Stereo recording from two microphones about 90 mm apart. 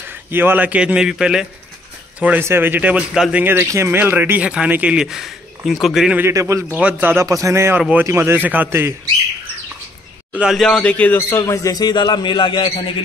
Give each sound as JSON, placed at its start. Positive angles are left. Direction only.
{"t": 0.1, "sound": "a man's voice", "side_deg": -25}
{"t": 2.4, "sound": "a man's voice", "side_deg": -25}
{"t": 3.4, "sound": "speech", "side_deg": -25}
{"t": 4.9, "sound": "speech", "side_deg": -5}
{"t": 6.3, "sound": "a man's voice", "side_deg": -35}
{"t": 6.7, "sound": "speech", "side_deg": -15}
{"t": 7.2, "sound": "a man's voice", "side_deg": -35}
{"t": 10.3, "sound": "a man's voice", "side_deg": -10}
{"t": 10.6, "sound": "speech", "side_deg": 5}
{"t": 10.9, "sound": "speech", "side_deg": 20}
{"t": 11.7, "sound": "a man's voice", "side_deg": 50}